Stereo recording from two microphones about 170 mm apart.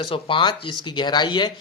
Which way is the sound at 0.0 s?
30° left (ahead or behind).